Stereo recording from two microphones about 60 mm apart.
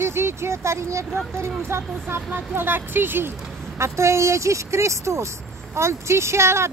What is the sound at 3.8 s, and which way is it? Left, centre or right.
Speech, right.